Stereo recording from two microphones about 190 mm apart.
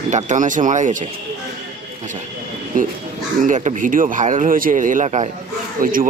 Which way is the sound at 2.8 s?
45° right (ahead or behind).